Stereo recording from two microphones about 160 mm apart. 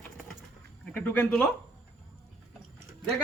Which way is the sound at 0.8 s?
10° left (ahead or behind).